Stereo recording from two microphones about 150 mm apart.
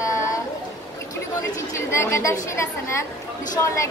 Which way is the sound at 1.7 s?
20° left (ahead or behind).